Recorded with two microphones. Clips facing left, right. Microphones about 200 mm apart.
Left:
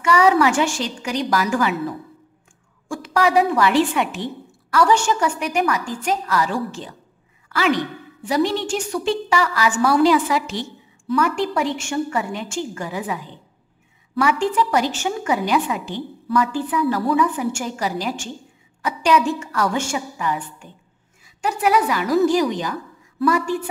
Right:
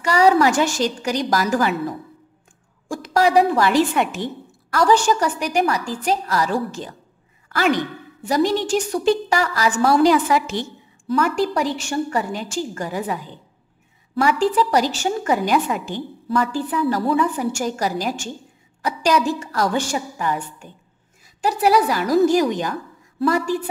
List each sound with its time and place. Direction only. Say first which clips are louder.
0.0 s a woman's voice: right 1 dB; 35° right (ahead or behind)
2.9 s a woman's voice: right 1 dB; 40° right (ahead or behind)
14.2 s a woman's voice: right 1 dB; 35° right (ahead or behind)
16.3 s a woman's voice: left 1 dB; 35° right (ahead or behind)
23.3 s a woman's voice: right 1 dB; 35° right (ahead or behind)